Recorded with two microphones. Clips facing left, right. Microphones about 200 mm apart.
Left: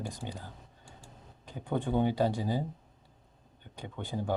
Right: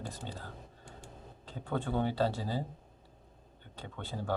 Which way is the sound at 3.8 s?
15° left (ahead or behind).